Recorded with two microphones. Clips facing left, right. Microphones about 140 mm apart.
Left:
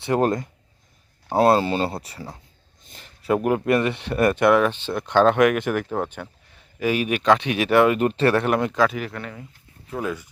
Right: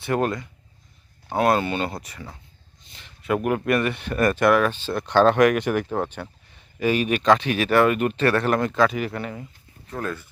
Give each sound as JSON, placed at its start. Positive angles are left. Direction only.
{"t": 0.0, "sound": "speech", "side_deg": 25}
{"t": 1.3, "sound": "speech", "side_deg": 30}
{"t": 2.8, "sound": "a sound", "side_deg": 45}
{"t": 3.2, "sound": "speech", "side_deg": 25}
{"t": 7.9, "sound": "speech", "side_deg": 30}
{"t": 8.4, "sound": "speech", "side_deg": 10}
{"t": 9.8, "sound": "speech", "side_deg": 10}